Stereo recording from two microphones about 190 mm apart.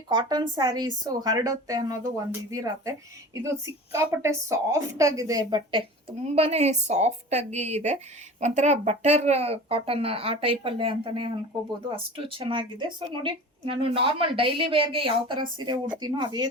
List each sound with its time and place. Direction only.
0.1 s speech: 25° right (ahead or behind)
3.9 s a woman's voice: 15° right (ahead or behind)